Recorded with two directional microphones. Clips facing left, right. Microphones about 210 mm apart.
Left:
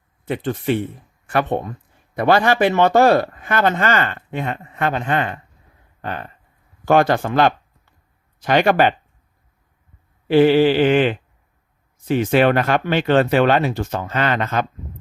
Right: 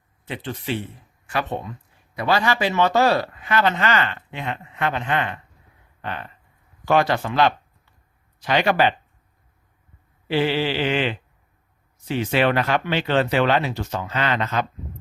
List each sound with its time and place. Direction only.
0.3 s speech: 50° left (ahead or behind)
6.0 s a sound: 45° left (ahead or behind)
6.8 s speech: 50° left (ahead or behind)
10.2 s speech: 50° left (ahead or behind)